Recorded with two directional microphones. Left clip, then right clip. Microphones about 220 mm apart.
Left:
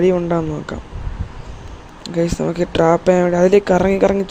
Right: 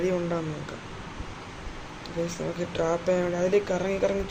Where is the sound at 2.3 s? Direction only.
40° left (ahead or behind).